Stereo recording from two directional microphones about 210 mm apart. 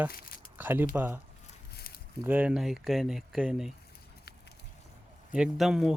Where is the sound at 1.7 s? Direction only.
50° left (ahead or behind).